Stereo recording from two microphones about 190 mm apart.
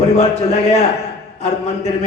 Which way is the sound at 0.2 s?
35° left (ahead or behind).